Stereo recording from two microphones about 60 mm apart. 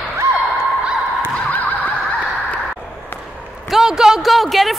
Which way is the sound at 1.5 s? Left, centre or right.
Left.